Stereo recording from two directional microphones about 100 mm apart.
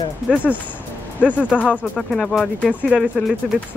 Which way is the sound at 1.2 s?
15° left (ahead or behind).